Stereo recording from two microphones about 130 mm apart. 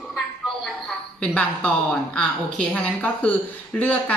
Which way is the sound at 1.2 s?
10° left (ahead or behind).